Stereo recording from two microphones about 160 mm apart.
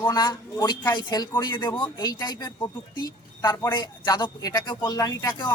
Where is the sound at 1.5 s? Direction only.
10° left (ahead or behind).